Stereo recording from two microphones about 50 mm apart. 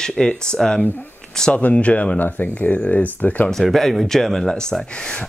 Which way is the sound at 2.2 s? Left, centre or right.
Left.